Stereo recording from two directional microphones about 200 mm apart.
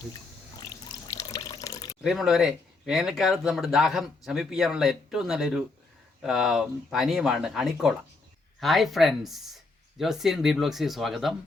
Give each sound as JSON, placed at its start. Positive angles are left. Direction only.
{"t": 0.6, "sound": "water", "side_deg": 15}
{"t": 2.0, "sound": "speech", "side_deg": 0}